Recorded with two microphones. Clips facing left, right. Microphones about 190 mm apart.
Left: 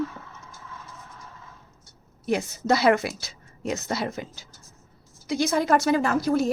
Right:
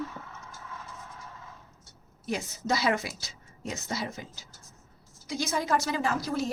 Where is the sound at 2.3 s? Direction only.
60° left (ahead or behind).